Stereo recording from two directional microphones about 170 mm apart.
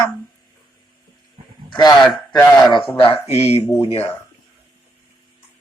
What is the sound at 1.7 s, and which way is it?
A man's voice, 25° left (ahead or behind).